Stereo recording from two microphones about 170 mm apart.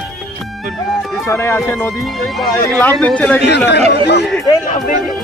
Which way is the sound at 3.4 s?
90° left.